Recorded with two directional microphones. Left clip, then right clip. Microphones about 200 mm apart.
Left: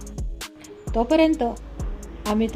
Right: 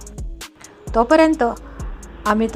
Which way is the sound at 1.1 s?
5° right (ahead or behind).